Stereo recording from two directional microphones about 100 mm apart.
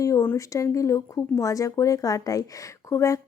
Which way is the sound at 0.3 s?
30° left (ahead or behind).